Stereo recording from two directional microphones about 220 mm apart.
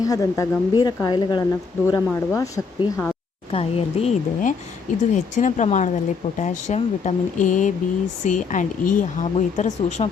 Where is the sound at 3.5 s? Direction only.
25° left (ahead or behind).